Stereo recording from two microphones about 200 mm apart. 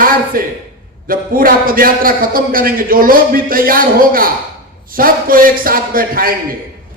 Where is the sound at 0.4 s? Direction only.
45° right (ahead or behind).